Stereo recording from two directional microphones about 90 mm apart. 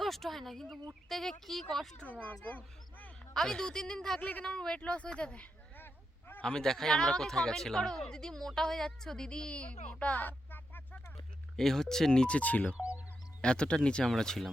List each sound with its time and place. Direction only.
0.0 s speech: centre (ahead or behind)
2.0 s speech: 15° left (ahead or behind)
3.3 s speech: 5° left (ahead or behind)
4.2 s speech: 20° left (ahead or behind)
6.4 s speech: 10° left (ahead or behind)
11.5 s speech: 5° left (ahead or behind)
12.7 s music: 15° right (ahead or behind)
13.4 s speech: 10° left (ahead or behind)